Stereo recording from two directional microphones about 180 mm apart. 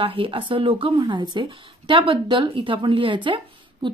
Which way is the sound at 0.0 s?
30° right (ahead or behind).